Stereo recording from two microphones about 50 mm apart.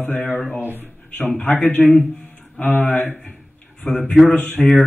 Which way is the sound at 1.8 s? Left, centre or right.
Centre.